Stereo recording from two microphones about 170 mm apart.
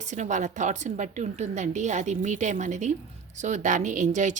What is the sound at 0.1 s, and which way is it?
A woman's voice, 45° right (ahead or behind).